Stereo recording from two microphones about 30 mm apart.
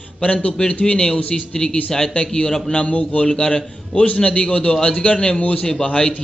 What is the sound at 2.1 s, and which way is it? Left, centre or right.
Speech, left.